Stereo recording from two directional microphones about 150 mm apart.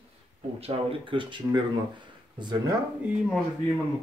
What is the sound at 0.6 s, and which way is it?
Speech, 35° right (ahead or behind).